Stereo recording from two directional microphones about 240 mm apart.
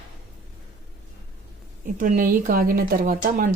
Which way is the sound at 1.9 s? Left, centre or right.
Right.